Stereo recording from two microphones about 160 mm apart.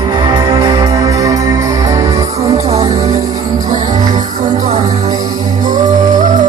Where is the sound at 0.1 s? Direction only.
25° right (ahead or behind).